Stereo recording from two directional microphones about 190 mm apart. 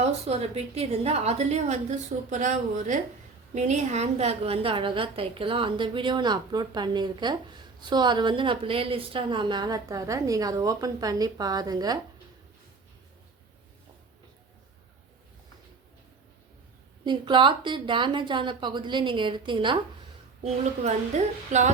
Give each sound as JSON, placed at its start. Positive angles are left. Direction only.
{"t": 0.0, "sound": "a woman's voice", "side_deg": -35}
{"t": 17.1, "sound": "a woman's voice", "side_deg": -25}
{"t": 20.4, "sound": "a woman's voice", "side_deg": -35}